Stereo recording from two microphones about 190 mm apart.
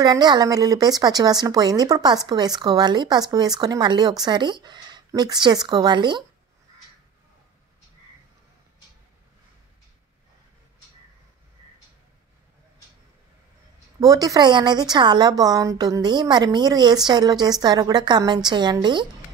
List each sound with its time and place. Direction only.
0.0 s speech: 20° right (ahead or behind)
13.9 s speech: 20° right (ahead or behind)